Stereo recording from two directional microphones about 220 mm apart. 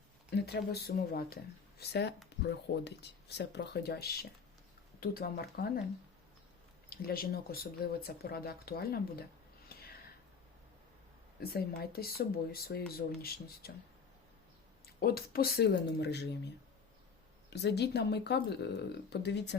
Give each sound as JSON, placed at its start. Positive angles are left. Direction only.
{"t": 0.3, "sound": "speech", "side_deg": 50}
{"t": 6.9, "sound": "speech", "side_deg": 45}
{"t": 9.7, "sound": "a sound", "side_deg": 45}
{"t": 11.3, "sound": "speech", "side_deg": 45}
{"t": 14.8, "sound": "speech", "side_deg": 45}
{"t": 17.5, "sound": "speech", "side_deg": 50}